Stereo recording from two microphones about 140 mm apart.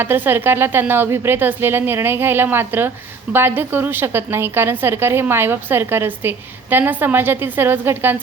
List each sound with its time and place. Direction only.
0.0 s a woman's voice: 15° right (ahead or behind)